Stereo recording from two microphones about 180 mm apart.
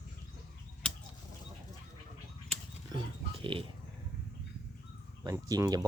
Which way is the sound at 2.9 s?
30° right (ahead or behind).